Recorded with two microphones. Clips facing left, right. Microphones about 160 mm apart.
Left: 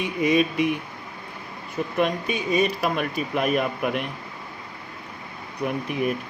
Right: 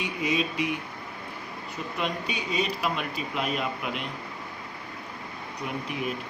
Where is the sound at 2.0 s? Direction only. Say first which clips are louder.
Left 7 dB; 50° left (ahead or behind).